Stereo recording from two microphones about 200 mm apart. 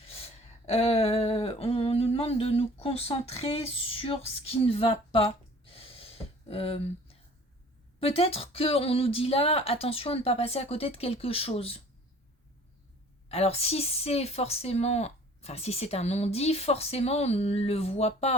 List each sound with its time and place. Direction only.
0.0 s a sound: 30° left (ahead or behind)
6.5 s speech: 30° left (ahead or behind)
13.2 s speech: 30° left (ahead or behind)